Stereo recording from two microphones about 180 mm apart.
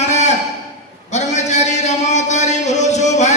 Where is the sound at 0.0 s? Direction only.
40° left (ahead or behind).